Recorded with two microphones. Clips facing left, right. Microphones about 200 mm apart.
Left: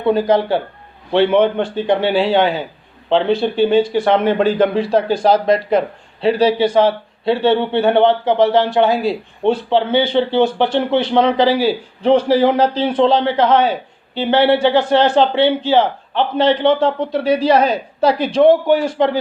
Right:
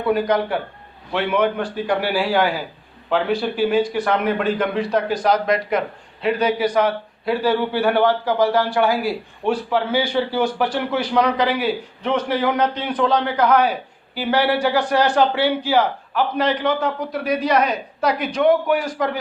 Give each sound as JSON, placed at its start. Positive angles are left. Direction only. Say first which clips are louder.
{"t": 0.0, "sound": "a man's voice", "louder": "left 4 dB", "side_deg": 25}